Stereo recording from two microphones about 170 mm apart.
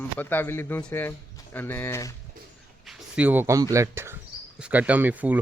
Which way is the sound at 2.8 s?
5° right (ahead or behind).